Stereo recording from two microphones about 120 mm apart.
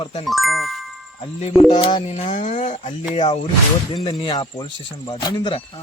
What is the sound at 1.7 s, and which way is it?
Speech, 40° left (ahead or behind).